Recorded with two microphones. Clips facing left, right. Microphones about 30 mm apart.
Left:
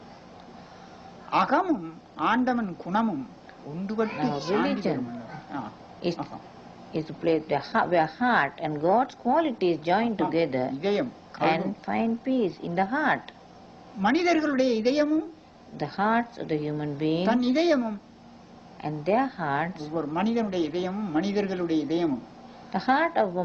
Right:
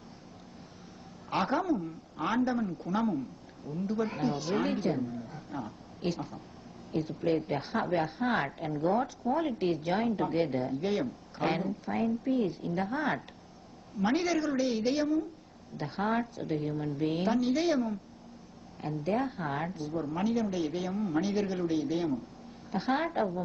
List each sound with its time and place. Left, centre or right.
1.3 s a woman's voice: left
2.5 s a woman's voice: left
19.0 s a woman's voice: left